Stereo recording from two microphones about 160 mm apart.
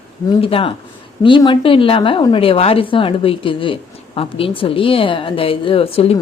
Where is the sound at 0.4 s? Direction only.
35° left (ahead or behind).